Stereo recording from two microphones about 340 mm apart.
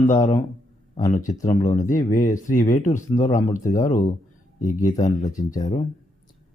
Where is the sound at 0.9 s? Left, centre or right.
Left.